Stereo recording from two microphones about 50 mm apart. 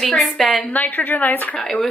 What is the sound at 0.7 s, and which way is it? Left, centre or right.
Speech, left.